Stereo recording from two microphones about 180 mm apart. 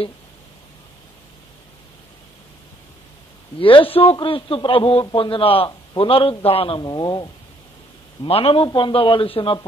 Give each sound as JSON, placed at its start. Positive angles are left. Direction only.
{"t": 3.5, "sound": "a man's voice", "side_deg": 30}